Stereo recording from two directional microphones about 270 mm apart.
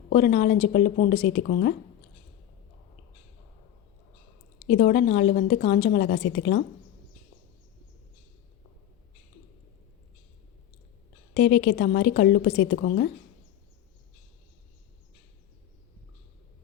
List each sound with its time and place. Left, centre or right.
0.1 s a woman's voice: left
4.7 s a woman's voice: left
11.3 s a woman's voice: left